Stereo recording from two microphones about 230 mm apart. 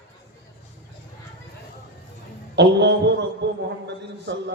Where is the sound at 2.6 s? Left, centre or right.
Right.